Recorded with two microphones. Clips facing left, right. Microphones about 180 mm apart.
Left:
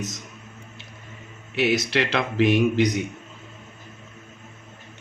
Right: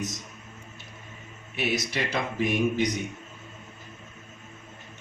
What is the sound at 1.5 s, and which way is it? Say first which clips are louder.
Speech: left 7 dB; 75° left (ahead or behind).